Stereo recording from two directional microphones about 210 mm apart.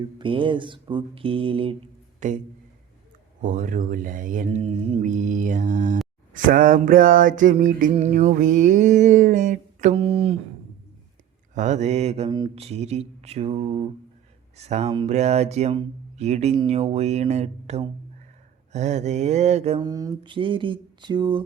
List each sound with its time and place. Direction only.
0.0 s mantra: 25° right (ahead or behind)
2.2 s mantra: 35° right (ahead or behind)
3.4 s mantra: 40° right (ahead or behind)
11.5 s mantra: 35° right (ahead or behind)
19.8 s mantra: 15° right (ahead or behind)